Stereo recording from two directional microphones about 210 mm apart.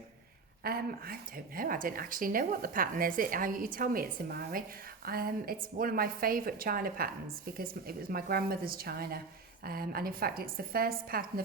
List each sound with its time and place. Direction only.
0.6 s a woman's voice: 45° right (ahead or behind)